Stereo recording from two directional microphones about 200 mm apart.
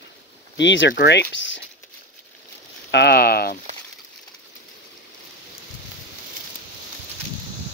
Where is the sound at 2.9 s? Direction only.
55° left (ahead or behind).